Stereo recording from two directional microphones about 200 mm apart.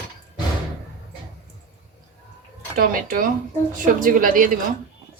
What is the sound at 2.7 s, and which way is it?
Speech, 45° right (ahead or behind).